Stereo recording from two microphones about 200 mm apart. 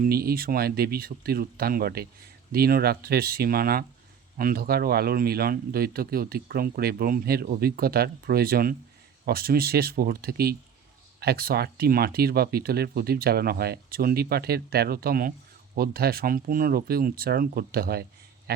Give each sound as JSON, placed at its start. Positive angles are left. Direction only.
{"t": 0.0, "sound": "speech", "side_deg": -50}